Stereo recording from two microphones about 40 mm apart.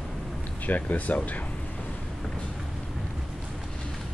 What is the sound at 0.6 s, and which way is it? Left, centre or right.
Speech, left.